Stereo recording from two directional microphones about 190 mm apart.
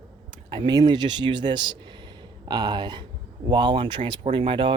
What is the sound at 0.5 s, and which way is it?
Speech, 25° right (ahead or behind).